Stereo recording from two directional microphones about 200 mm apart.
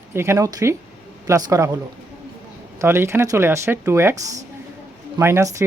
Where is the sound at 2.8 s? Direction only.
10° right (ahead or behind).